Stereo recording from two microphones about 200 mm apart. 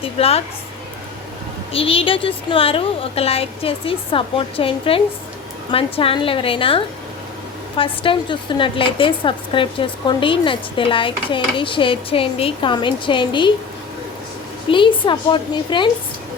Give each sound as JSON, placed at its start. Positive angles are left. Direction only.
{"t": 0.0, "sound": "a woman's voice", "side_deg": 30}
{"t": 1.7, "sound": "a woman's voice", "side_deg": 25}
{"t": 14.7, "sound": "a woman's voice", "side_deg": 25}